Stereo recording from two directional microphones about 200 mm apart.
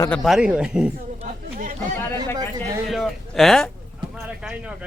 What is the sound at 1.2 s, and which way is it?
Chatter, 40° right (ahead or behind).